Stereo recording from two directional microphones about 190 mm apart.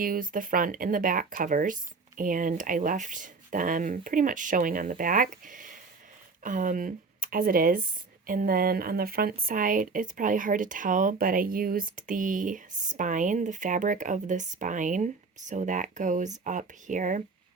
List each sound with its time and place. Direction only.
0.0 s speech: 45° right (ahead or behind)